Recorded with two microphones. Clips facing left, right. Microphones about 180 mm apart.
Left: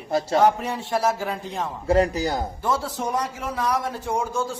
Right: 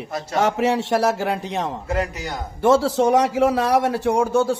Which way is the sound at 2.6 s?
85° right.